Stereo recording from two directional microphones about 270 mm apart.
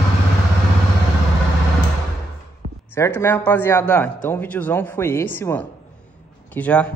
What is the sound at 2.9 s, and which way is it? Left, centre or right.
A man's voice, centre.